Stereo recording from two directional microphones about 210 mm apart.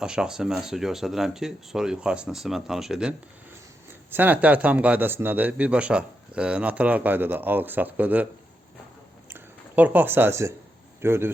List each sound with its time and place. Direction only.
0.0 s speech: 5° right (ahead or behind)
9.3 s speech: 10° right (ahead or behind)